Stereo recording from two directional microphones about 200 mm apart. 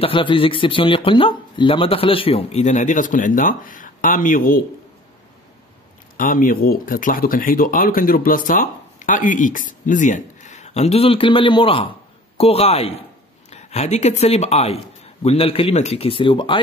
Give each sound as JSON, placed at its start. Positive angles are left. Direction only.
{"t": 0.0, "sound": "speech", "side_deg": 25}
{"t": 6.1, "sound": "speech", "side_deg": 45}